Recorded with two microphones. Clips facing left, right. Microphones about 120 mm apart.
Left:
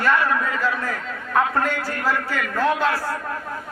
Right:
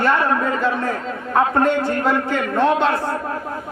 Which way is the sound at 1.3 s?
25° right (ahead or behind).